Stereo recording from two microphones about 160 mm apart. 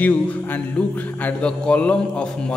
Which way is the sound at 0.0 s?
10° left (ahead or behind).